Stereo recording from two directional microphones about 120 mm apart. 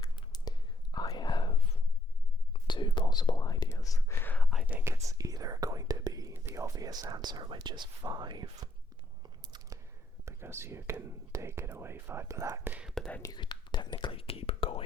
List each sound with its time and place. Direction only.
0.2 s whispering: 35° left (ahead or behind); by 4.4 s 15° left (ahead or behind)
4.6 s whispering: 15° right (ahead or behind); by 8.7 s 40° right (ahead or behind)
9.4 s chewing: 35° right (ahead or behind)
10.2 s speech: 20° right (ahead or behind)
12.9 s whispering: 10° left (ahead or behind)
13.3 s whispering: 40° left (ahead or behind)